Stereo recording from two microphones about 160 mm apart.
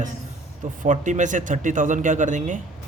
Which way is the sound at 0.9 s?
50° right (ahead or behind).